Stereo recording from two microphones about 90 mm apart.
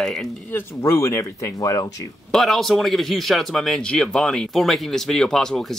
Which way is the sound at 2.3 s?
5° left (ahead or behind).